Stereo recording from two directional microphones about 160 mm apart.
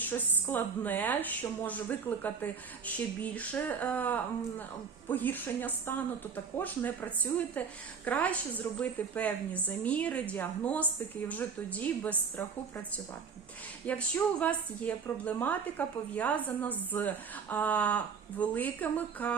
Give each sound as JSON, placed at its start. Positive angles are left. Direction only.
{"t": 0.0, "sound": "a woman's voice", "side_deg": 10}
{"t": 13.8, "sound": "a woman's voice", "side_deg": 10}